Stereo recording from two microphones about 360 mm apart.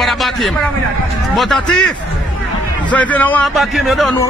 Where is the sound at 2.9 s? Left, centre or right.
Centre.